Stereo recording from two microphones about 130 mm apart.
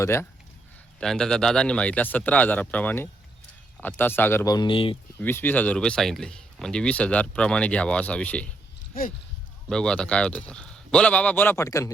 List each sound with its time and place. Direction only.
0.0 s speech: 20° left (ahead or behind)
0.9 s speech: 5° left (ahead or behind)
4.4 s speech: 35° left (ahead or behind)
5.2 s speech: 15° left (ahead or behind)
9.6 s speech: 5° left (ahead or behind); by 11.9 s 25° left (ahead or behind)